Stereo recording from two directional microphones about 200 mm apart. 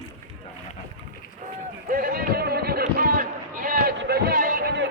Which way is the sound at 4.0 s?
55° right (ahead or behind).